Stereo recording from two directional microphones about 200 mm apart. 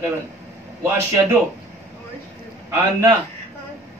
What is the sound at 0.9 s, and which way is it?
Speech, 15° right (ahead or behind).